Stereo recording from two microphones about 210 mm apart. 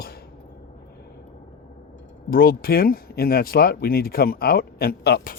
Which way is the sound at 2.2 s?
45° left (ahead or behind).